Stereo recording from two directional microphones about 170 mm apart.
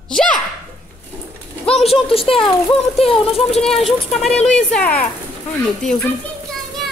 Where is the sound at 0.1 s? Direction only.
5° left (ahead or behind).